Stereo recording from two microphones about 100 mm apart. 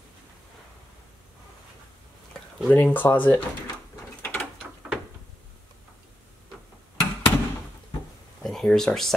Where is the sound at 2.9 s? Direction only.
20° left (ahead or behind).